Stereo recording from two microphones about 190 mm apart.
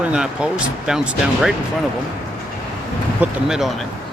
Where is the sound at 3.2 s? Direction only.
5° right (ahead or behind).